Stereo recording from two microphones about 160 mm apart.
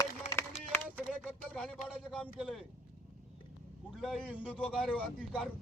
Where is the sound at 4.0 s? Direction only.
Centre (ahead or behind).